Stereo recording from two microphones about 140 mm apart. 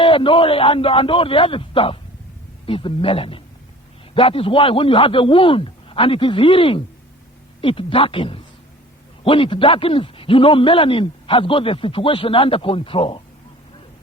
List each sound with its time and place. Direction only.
0.0 s a man's voice: 40° left (ahead or behind)